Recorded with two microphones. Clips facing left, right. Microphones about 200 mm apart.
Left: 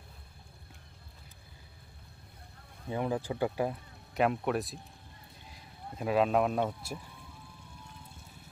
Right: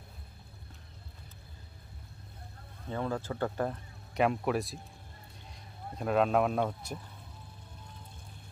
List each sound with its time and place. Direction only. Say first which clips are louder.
2.9 s speech: left 2 dB; 15° left (ahead or behind)